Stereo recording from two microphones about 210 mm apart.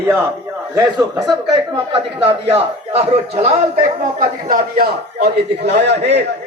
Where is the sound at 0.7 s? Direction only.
15° right (ahead or behind).